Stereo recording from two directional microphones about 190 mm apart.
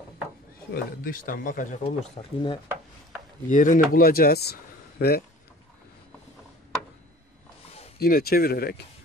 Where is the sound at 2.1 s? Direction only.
25° left (ahead or behind).